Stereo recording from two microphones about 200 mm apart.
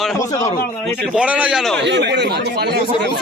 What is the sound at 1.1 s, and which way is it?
Speech, 5° right (ahead or behind).